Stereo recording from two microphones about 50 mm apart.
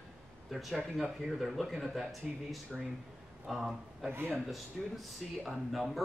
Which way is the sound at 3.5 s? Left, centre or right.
Centre.